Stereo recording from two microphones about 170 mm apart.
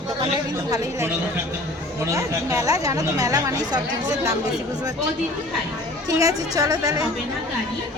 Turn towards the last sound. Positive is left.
turn(degrees=-20)  # may be behind; listen again after turning